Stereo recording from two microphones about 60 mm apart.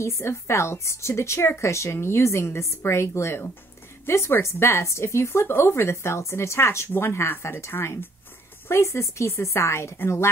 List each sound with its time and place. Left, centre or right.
0.0 s speech: left